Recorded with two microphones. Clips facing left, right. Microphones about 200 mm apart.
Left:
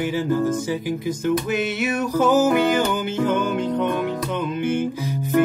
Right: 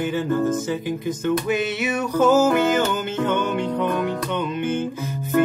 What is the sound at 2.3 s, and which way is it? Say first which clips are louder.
Music: left 1 dB; 15° left (ahead or behind).